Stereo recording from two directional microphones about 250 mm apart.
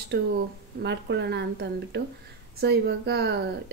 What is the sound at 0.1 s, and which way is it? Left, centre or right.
A woman's voice, right.